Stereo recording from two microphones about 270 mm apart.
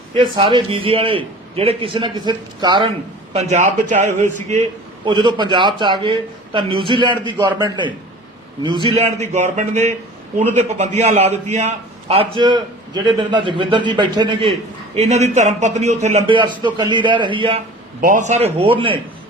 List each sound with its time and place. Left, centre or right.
0.3 s a man's voice: centre